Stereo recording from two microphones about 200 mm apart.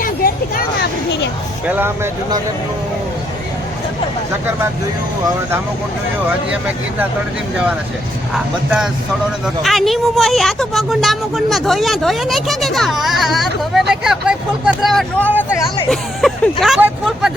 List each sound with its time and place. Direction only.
0.0 s a sound: 45° left (ahead or behind)
1.6 s speech: 10° right (ahead or behind)
8.3 s speech: centre (ahead or behind)